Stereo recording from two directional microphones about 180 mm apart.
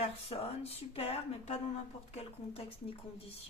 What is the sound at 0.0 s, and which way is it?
A woman's voice, 35° left (ahead or behind).